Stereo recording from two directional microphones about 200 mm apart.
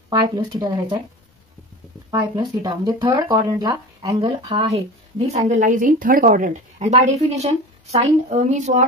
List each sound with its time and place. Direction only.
0.1 s speech: 20° right (ahead or behind)
2.0 s speech: 20° right (ahead or behind)
5.5 s a woman's voice: 40° right (ahead or behind)